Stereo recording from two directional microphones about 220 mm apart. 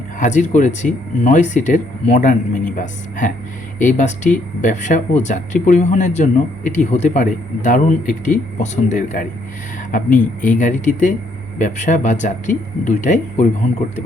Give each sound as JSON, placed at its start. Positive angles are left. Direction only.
{"t": 0.2, "sound": "speech", "side_deg": 35}